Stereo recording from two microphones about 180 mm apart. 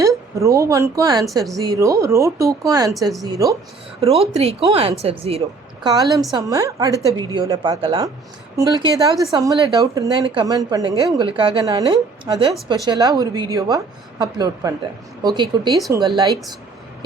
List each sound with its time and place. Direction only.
0.0 s a woman's voice: 15° right (ahead or behind)
4.0 s speech: 35° right (ahead or behind)
5.8 s a woman's voice: 20° right (ahead or behind)